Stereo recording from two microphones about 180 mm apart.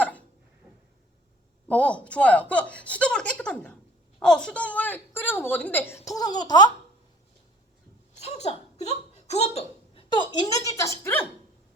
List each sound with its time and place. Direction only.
1.6 s speech: 5° left (ahead or behind); by 6.7 s 25° left (ahead or behind)
8.2 s speech: 35° left (ahead or behind); by 11.3 s 10° left (ahead or behind)